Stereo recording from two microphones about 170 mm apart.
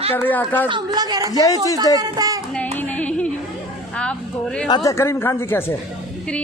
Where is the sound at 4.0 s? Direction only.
5° left (ahead or behind).